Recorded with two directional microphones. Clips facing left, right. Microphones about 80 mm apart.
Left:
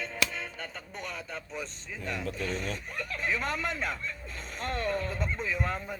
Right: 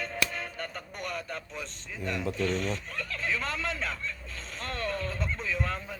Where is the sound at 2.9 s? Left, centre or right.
Centre.